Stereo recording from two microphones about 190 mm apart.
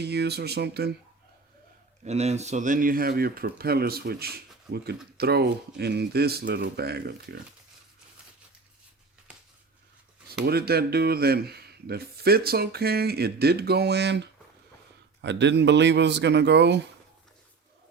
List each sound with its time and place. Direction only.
0.0 s speech: 60° right (ahead or behind)
2.0 s speech: 35° right (ahead or behind); by 7.3 s 55° right (ahead or behind)
10.4 s speech: 55° right (ahead or behind)